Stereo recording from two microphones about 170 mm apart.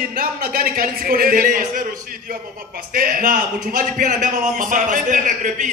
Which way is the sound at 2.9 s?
55° right (ahead or behind).